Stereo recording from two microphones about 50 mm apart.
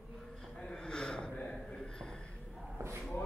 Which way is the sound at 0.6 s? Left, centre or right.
Centre.